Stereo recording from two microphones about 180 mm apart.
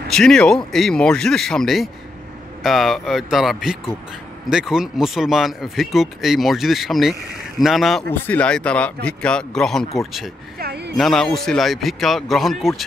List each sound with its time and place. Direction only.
0.1 s speech: centre (ahead or behind)
10.6 s a sound: 65° right (ahead or behind)
11.0 s speech: centre (ahead or behind)